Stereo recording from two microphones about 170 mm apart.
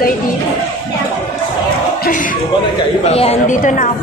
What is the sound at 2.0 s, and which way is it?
Speech, 50° left (ahead or behind).